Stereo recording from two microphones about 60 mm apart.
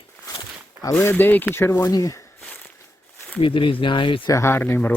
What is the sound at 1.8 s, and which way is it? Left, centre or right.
Speech, left.